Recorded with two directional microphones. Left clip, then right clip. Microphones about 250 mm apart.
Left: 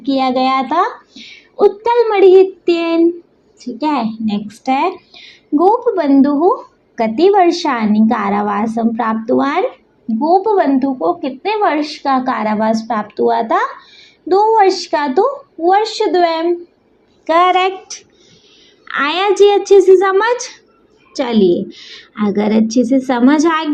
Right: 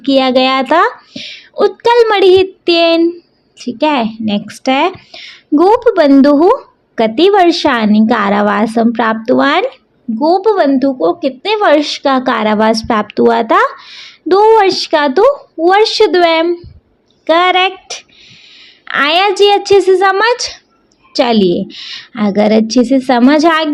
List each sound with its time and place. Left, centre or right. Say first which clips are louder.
0.0 s a woman's voice: right 5 dB; right
18.2 s a sound: right 8 dB; right
18.9 s a woman's voice: right 4 dB; right
21.3 s a woman's voice: right 1 dB; right
21.9 s a woman's voice: right 4 dB; right